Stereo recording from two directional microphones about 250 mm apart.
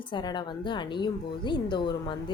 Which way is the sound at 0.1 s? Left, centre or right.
Centre.